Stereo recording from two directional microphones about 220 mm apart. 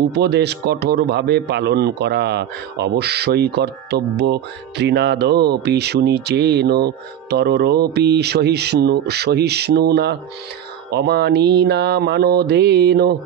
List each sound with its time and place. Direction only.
0.1 s a man's voice: 50° right (ahead or behind)